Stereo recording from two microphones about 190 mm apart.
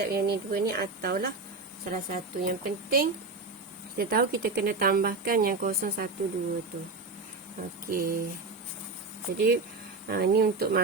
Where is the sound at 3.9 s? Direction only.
55° right (ahead or behind).